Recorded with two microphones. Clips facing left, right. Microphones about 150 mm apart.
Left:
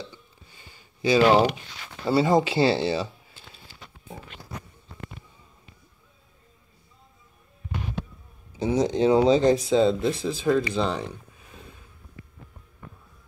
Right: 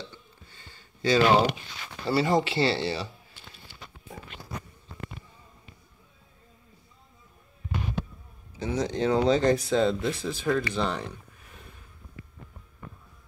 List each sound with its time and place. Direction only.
0.1 s a sound: 10° left (ahead or behind)
2.0 s speech: 20° left (ahead or behind)
8.5 s speech: 20° left (ahead or behind)
10.4 s speech: 15° left (ahead or behind)